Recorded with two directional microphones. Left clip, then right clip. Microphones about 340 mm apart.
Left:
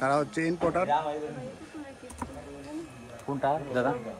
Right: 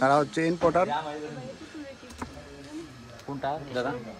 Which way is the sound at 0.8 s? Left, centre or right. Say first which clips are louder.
Left 3 dB; left.